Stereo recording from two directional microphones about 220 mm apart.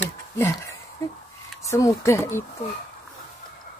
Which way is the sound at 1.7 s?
15° left (ahead or behind).